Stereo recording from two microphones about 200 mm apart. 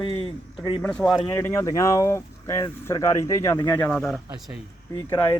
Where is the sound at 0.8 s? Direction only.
5° left (ahead or behind).